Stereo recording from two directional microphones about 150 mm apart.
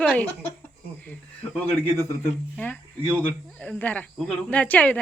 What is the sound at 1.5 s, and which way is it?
Speech, 10° left (ahead or behind).